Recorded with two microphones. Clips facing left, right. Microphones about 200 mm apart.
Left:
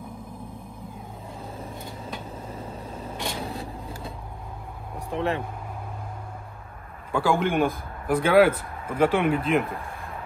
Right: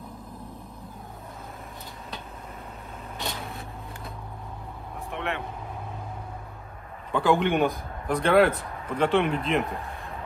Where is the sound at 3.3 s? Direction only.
30° left (ahead or behind).